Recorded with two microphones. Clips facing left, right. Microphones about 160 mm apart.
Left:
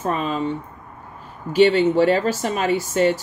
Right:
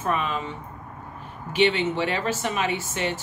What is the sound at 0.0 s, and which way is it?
Speech, 35° left (ahead or behind).